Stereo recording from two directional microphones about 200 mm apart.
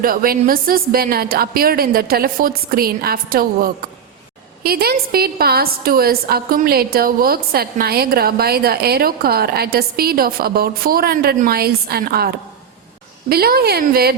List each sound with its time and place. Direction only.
0.0 s a woman's voice: 45° right (ahead or behind)
13.3 s a woman's voice: 50° right (ahead or behind)